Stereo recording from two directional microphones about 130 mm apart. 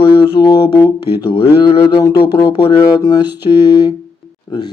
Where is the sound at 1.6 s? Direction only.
40° left (ahead or behind).